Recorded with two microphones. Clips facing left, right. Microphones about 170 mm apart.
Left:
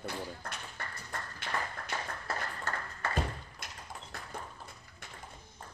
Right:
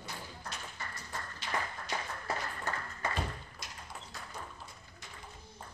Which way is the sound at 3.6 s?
55° left (ahead or behind).